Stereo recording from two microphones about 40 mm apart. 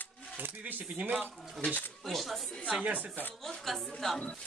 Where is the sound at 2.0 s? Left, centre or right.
Centre.